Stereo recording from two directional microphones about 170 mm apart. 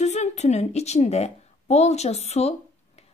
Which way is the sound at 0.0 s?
40° left (ahead or behind).